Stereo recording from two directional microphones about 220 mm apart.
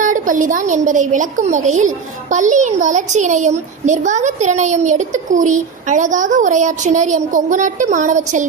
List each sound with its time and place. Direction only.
0.0 s a child's voice: 35° right (ahead or behind)